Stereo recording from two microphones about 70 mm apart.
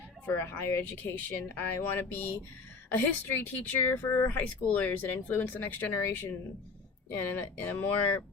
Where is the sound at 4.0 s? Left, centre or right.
Left.